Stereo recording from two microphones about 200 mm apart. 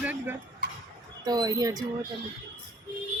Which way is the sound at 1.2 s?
20° right (ahead or behind).